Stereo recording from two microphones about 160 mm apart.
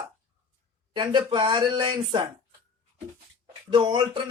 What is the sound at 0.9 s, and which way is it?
A man's voice, 30° right (ahead or behind).